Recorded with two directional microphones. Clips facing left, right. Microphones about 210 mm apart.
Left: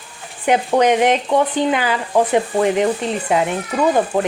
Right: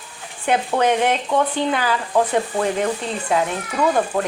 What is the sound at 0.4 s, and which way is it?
Speech, 15° left (ahead or behind).